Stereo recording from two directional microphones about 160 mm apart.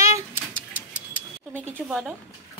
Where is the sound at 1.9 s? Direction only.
5° right (ahead or behind).